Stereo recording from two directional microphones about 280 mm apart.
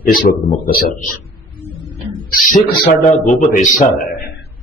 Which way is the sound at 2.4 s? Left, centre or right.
Left.